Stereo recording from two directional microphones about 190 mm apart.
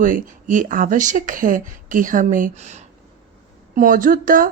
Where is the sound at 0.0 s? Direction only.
45° right (ahead or behind).